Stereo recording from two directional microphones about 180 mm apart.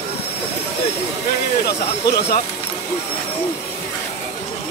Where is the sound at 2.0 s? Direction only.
65° left (ahead or behind).